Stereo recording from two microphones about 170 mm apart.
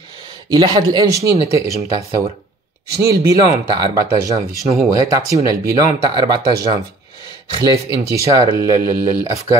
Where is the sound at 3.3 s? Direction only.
25° right (ahead or behind).